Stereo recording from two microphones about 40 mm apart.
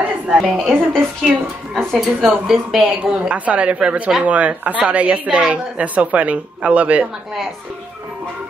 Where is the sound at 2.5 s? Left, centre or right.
Centre.